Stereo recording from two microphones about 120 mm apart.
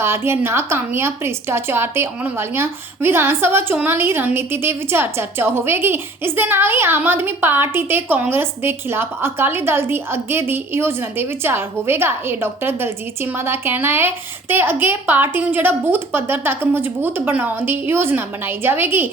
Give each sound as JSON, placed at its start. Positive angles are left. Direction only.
{"t": 0.0, "sound": "a woman's voice", "side_deg": -20}